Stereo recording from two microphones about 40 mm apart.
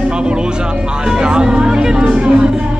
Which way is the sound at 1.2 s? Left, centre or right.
Centre.